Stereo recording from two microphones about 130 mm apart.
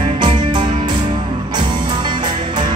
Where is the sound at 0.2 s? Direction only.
35° right (ahead or behind).